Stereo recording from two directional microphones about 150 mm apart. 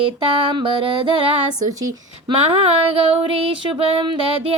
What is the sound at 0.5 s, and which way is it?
Female singing, 35° right (ahead or behind).